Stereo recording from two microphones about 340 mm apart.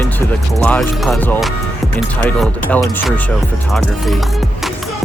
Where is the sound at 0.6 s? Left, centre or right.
Centre.